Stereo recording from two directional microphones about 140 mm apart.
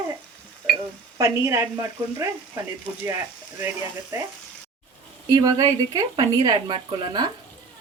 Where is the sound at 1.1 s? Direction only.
20° right (ahead or behind).